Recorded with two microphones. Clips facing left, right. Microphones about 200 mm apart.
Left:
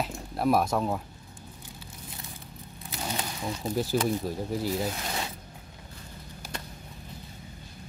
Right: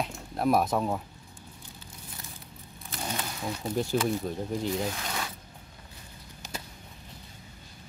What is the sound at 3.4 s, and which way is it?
Speech, 5° left (ahead or behind).